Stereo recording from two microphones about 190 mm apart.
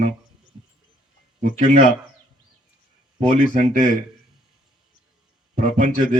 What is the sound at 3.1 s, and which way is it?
Speech, 45° right (ahead or behind).